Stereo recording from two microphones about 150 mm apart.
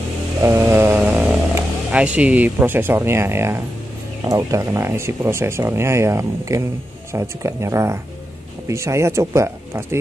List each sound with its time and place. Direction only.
0.4 s chainsaw: 20° right (ahead or behind)
1.9 s speech: 10° right (ahead or behind)